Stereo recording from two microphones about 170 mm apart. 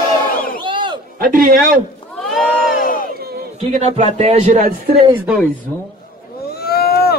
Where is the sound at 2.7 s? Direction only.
55° left (ahead or behind).